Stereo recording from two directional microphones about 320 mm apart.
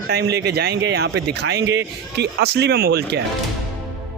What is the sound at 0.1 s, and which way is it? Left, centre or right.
Speech, right.